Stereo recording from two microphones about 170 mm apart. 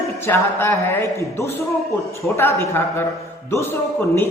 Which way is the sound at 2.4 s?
15° left (ahead or behind).